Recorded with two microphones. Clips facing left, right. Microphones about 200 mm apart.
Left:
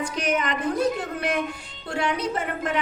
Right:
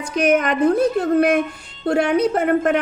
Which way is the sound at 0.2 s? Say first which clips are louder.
Right 10 dB; 55° right (ahead or behind).